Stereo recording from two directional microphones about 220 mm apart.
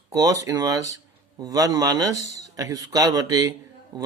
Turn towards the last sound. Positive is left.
turn(degrees=-20)  # may be behind; listen again after turning